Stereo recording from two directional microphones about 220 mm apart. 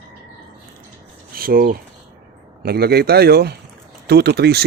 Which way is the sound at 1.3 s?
40° right (ahead or behind).